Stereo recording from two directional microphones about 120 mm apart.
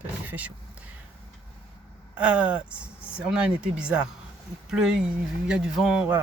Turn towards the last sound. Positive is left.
turn(degrees=-5)  # may be behind; listen again after turning